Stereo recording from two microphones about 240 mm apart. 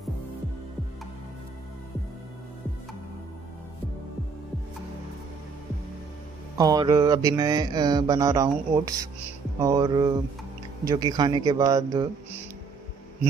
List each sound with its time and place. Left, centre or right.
6.6 s mantra: centre